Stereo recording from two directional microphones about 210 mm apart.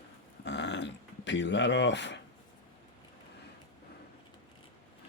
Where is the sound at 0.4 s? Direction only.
55° left (ahead or behind).